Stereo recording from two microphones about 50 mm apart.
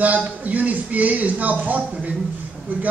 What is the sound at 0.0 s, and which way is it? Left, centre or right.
A man's voice, right.